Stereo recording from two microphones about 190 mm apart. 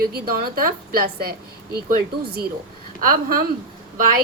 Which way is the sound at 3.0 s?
50° right (ahead or behind).